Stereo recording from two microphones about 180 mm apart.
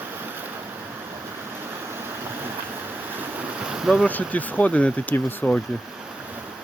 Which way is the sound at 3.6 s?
5° right (ahead or behind).